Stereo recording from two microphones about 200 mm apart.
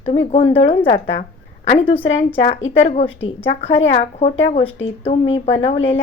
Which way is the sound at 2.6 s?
75° left (ahead or behind).